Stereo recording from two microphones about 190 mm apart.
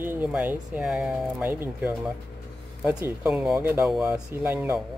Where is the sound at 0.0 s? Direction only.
10° right (ahead or behind).